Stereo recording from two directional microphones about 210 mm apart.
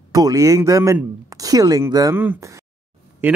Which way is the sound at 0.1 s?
15° right (ahead or behind).